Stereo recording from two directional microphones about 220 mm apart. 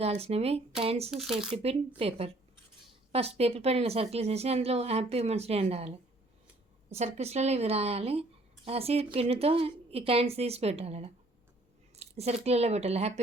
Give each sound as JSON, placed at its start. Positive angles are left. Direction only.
{"t": 0.0, "sound": "a woman's voice", "side_deg": -30}
{"t": 1.1, "sound": "speech", "side_deg": -5}
{"t": 2.0, "sound": "a woman's voice", "side_deg": -25}
{"t": 6.9, "sound": "a woman's voice", "side_deg": -30}